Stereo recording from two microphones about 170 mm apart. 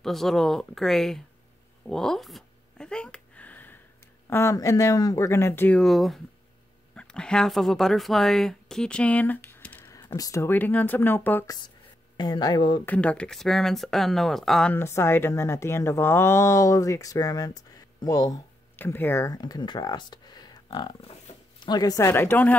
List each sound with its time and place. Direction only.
0.0 s speech: centre (ahead or behind)
1.9 s a sound: 5° left (ahead or behind)
4.3 s a woman's voice: 15° left (ahead or behind)
12.2 s speech: 25° left (ahead or behind)
12.8 s speech: 10° left (ahead or behind)